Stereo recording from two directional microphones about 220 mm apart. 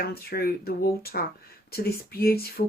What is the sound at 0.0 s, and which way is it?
Speech, 45° left (ahead or behind).